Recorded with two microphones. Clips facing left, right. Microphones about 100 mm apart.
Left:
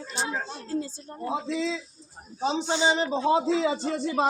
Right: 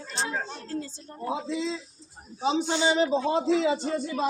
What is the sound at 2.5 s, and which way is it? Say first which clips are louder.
Speech: left 1 dB; 20° left (ahead or behind).